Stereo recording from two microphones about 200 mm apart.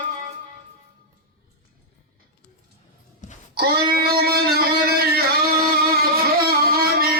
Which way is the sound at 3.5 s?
50° right (ahead or behind).